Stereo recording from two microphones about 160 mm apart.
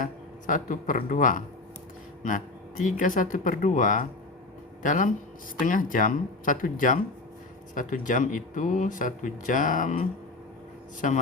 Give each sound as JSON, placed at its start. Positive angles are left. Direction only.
{"t": 0.0, "sound": "a man's voice", "side_deg": 55}